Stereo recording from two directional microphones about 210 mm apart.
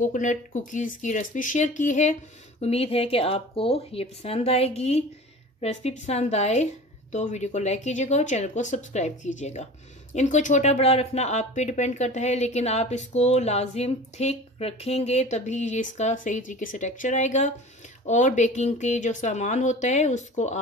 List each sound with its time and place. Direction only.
0.0 s speech: 35° left (ahead or behind)